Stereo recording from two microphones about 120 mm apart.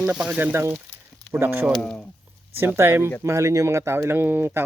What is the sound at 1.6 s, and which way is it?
Speech, 5° left (ahead or behind).